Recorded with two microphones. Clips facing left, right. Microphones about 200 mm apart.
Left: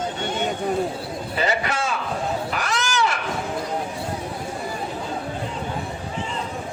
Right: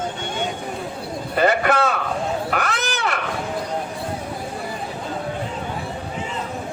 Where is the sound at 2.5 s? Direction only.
55° right (ahead or behind).